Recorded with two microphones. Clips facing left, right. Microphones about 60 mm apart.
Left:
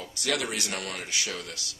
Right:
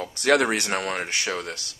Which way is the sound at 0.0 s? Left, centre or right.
Right.